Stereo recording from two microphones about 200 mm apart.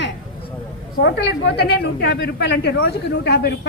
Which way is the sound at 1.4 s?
55° left (ahead or behind).